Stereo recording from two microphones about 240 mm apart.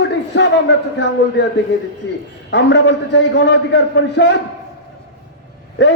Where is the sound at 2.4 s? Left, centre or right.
Left.